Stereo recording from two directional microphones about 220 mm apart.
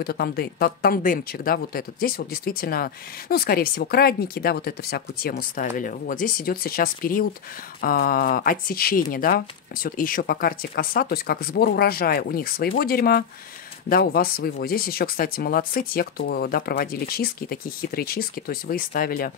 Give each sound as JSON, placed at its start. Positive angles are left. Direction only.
{"t": 0.0, "sound": "speech", "side_deg": 45}